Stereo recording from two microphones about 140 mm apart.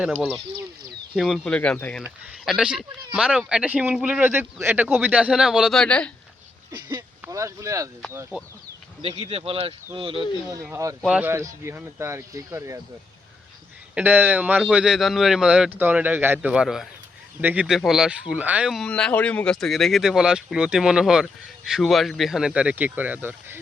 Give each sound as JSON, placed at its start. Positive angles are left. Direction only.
{"t": 0.2, "sound": "speech", "side_deg": 5}
{"t": 2.4, "sound": "speech", "side_deg": 0}
{"t": 6.9, "sound": "speech", "side_deg": -25}
{"t": 9.3, "sound": "speech", "side_deg": -45}
{"t": 10.7, "sound": "speech", "side_deg": -20}
{"t": 11.0, "sound": "a man's voice", "side_deg": -5}
{"t": 11.3, "sound": "speech", "side_deg": -20}
{"t": 13.9, "sound": "a man's voice", "side_deg": -15}
{"t": 18.9, "sound": "speech", "side_deg": 10}